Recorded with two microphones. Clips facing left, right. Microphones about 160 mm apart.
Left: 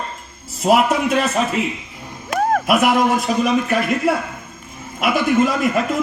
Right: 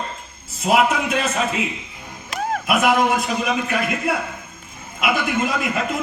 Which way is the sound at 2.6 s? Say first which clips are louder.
Right 1 dB; 40° left (ahead or behind).